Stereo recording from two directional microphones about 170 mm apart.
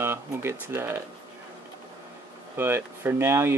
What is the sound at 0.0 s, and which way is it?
Speech, 15° right (ahead or behind).